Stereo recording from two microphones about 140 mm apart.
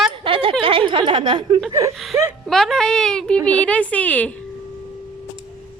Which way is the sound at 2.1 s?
20° right (ahead or behind).